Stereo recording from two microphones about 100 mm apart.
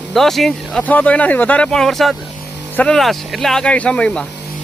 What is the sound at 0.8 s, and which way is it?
Speech, 15° left (ahead or behind).